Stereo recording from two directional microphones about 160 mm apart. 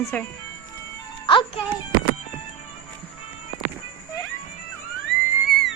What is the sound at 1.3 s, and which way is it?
Music, 30° left (ahead or behind).